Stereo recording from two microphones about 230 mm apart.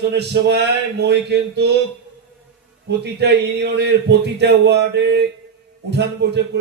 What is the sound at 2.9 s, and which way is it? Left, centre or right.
A man's voice, right.